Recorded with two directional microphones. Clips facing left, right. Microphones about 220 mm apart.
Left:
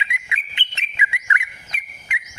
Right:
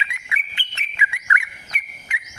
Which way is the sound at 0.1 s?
20° left (ahead or behind).